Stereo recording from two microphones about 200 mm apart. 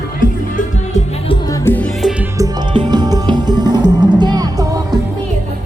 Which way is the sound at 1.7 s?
10° left (ahead or behind).